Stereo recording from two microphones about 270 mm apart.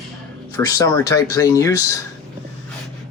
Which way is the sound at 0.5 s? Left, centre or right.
Centre.